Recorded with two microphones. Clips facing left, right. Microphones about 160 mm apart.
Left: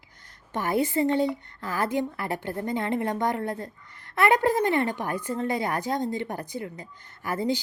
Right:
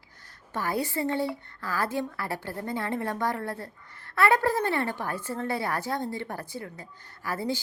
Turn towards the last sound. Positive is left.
turn(degrees=20)  # may be behind; listen again after turning